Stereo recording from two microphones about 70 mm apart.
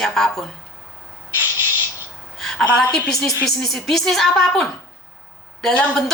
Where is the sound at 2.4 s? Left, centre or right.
Centre.